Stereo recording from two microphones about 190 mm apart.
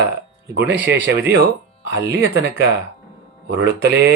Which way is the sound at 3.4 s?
65° right (ahead or behind).